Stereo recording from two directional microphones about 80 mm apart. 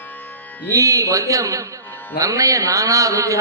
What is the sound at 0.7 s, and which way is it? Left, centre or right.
Speech, right.